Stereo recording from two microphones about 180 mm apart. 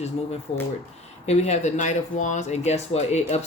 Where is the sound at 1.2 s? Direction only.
40° left (ahead or behind).